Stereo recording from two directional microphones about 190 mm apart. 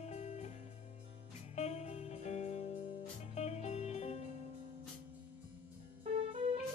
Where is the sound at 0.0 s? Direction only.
35° left (ahead or behind).